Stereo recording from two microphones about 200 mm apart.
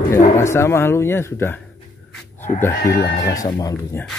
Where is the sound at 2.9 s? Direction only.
55° left (ahead or behind).